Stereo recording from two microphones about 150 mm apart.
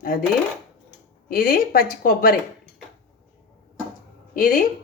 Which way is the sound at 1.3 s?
75° left (ahead or behind).